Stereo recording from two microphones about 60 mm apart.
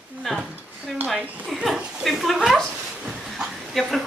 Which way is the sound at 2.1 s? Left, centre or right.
Centre.